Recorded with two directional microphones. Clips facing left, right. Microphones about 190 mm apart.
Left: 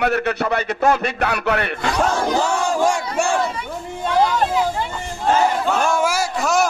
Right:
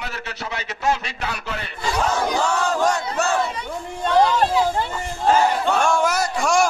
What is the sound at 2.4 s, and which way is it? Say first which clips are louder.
Battle cry: left 2 dB; 10° left (ahead or behind).